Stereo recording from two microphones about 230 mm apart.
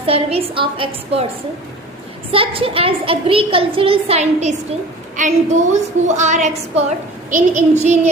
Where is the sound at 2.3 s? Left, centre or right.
Right.